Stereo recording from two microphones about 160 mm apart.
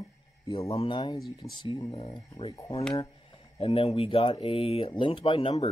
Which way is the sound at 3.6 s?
40° left (ahead or behind).